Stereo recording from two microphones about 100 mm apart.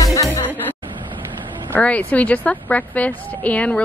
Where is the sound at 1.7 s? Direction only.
15° left (ahead or behind).